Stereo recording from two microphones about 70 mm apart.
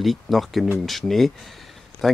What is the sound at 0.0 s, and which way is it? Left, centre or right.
Speech, centre.